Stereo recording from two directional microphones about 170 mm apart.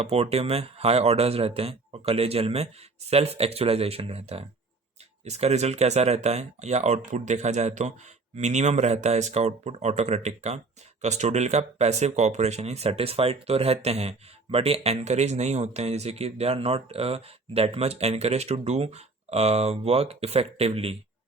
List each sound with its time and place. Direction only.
0.0 s speech: 35° right (ahead or behind)